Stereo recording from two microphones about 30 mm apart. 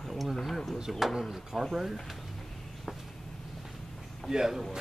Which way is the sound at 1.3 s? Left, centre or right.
Centre.